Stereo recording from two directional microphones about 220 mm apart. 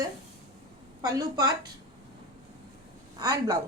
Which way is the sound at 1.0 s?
15° right (ahead or behind).